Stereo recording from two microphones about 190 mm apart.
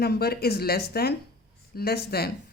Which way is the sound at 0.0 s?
55° left (ahead or behind).